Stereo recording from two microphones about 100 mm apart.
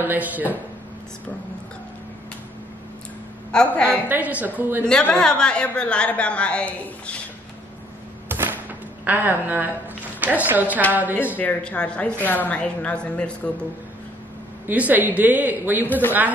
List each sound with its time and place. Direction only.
0.0 s speech: 20° right (ahead or behind)
3.5 s a woman's voice: 10° left (ahead or behind)
3.9 s speech: 15° right (ahead or behind)
5.0 s a woman's voice: 10° left (ahead or behind)
8.3 s a sound: 20° right (ahead or behind)
10.2 s speech: 15° right (ahead or behind)
11.3 s a woman's voice: 15° left (ahead or behind)
14.7 s speech: 15° right (ahead or behind)